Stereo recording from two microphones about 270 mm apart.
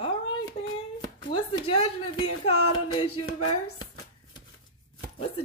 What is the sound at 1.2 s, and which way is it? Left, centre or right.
Speech, centre.